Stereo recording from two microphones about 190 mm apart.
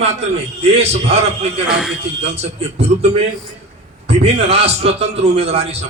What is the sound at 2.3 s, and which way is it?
A man's voice, 35° right (ahead or behind).